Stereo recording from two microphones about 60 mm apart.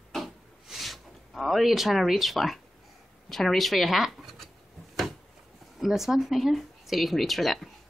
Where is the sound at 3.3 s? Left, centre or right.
Centre.